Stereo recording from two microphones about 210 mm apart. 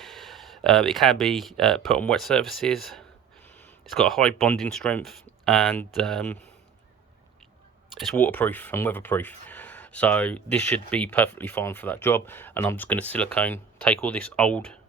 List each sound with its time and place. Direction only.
0.0 s speech: centre (ahead or behind)
8.1 s speech: 10° left (ahead or behind)